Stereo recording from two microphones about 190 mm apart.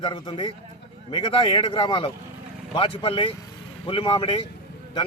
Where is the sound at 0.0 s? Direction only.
25° left (ahead or behind).